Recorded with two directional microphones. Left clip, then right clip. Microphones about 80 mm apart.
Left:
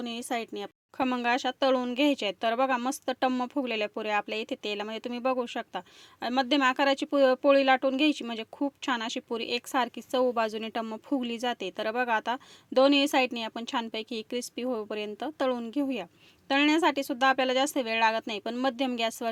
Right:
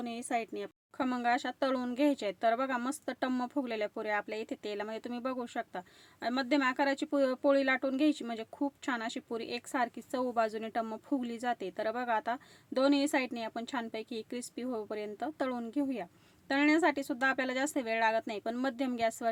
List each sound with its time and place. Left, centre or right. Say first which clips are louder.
0.0 s speech: left 2 dB; left
1.0 s speech: left 4 dB; left; by 3.5 s centre
3.5 s speech: left 5 dB; left